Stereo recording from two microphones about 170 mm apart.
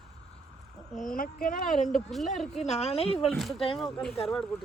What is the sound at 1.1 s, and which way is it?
Speech, 55° left (ahead or behind).